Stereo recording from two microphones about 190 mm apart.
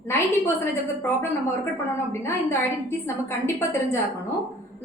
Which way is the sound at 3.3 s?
15° left (ahead or behind).